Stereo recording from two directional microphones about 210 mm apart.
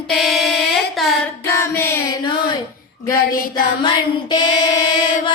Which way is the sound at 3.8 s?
20° left (ahead or behind).